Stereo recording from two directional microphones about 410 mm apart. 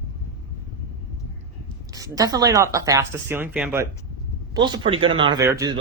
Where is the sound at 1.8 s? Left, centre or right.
Centre.